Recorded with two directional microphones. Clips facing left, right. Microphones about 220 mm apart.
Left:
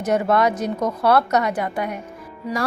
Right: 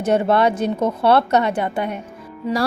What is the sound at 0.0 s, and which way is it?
A woman's voice, 30° right (ahead or behind).